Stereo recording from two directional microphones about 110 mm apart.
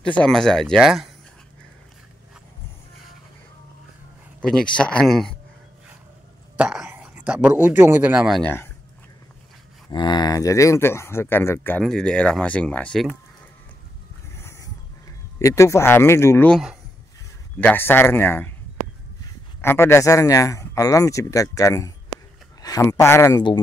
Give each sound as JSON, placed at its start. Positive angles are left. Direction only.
{"t": 0.0, "sound": "speech", "side_deg": 10}
{"t": 4.4, "sound": "speech", "side_deg": 10}
{"t": 6.5, "sound": "speech", "side_deg": -10}
{"t": 9.8, "sound": "speech", "side_deg": 40}
{"t": 11.8, "sound": "speech", "side_deg": 5}
{"t": 14.3, "sound": "a sound", "side_deg": 25}
{"t": 15.3, "sound": "speech", "side_deg": 25}
{"t": 17.6, "sound": "speech", "side_deg": 15}
{"t": 19.6, "sound": "speech", "side_deg": 20}
{"t": 22.6, "sound": "a sound", "side_deg": 35}
{"t": 22.8, "sound": "speech", "side_deg": 25}